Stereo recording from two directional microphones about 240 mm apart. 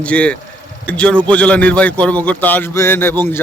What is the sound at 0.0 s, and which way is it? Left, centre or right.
A man's voice, centre.